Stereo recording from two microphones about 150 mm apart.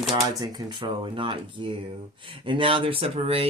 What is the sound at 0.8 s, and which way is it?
Speech, 35° right (ahead or behind).